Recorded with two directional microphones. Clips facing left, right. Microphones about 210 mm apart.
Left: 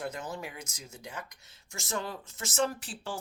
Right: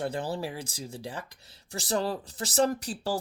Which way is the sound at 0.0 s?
30° right (ahead or behind).